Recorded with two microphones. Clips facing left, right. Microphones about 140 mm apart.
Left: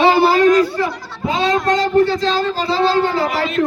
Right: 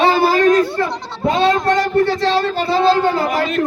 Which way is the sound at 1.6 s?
20° left (ahead or behind).